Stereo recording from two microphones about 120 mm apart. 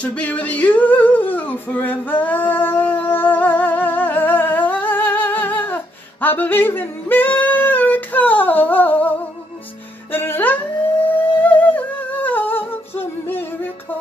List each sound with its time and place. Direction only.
0.0 s a sound: 10° left (ahead or behind)
2.5 s humming: 15° left (ahead or behind)
6.2 s yodeling: 15° left (ahead or behind)
10.1 s music: 20° left (ahead or behind)
11.4 s humming: 15° left (ahead or behind)